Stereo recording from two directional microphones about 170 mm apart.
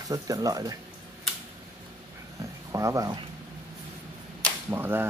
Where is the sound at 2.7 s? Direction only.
20° right (ahead or behind).